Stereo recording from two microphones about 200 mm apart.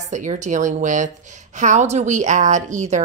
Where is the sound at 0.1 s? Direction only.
35° right (ahead or behind).